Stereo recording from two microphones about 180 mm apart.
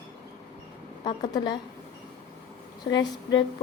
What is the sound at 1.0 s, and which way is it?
Speech, 25° left (ahead or behind).